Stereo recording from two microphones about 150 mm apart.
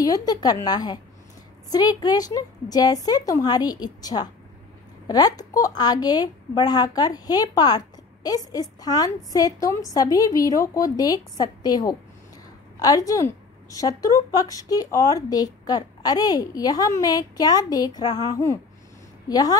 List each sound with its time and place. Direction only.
0.0 s a woman's voice: 25° left (ahead or behind)